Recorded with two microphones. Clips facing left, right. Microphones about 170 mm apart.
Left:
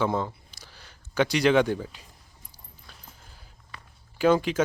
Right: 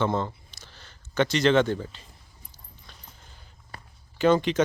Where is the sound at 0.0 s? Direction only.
10° left (ahead or behind).